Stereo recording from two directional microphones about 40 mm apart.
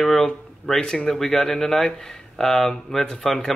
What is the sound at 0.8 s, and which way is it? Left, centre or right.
Speech, centre.